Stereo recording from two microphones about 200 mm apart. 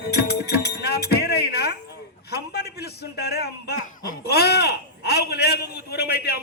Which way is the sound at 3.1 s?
55° left (ahead or behind).